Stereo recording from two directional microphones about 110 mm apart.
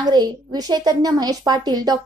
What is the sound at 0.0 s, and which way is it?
Speech, 40° right (ahead or behind).